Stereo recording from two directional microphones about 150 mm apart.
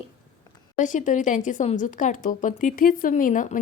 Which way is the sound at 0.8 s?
55° left (ahead or behind).